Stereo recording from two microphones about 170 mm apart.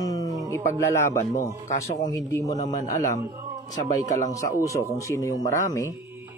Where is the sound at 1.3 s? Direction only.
45° left (ahead or behind).